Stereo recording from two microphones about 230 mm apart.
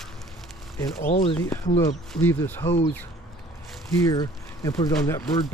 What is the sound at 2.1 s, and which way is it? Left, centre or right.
Speech, centre.